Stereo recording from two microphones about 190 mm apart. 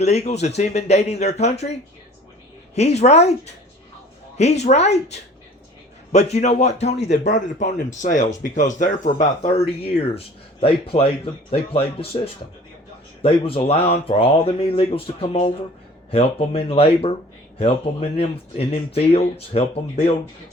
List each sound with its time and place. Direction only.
0.0 s speech: 35° left (ahead or behind)
2.7 s speech: 35° left (ahead or behind)
18.2 s speech: 30° left (ahead or behind)